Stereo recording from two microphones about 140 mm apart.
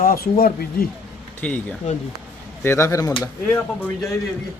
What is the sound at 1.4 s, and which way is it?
Speech, 10° left (ahead or behind).